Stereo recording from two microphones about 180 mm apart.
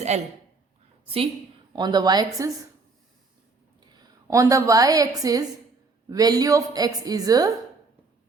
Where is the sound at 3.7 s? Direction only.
20° right (ahead or behind).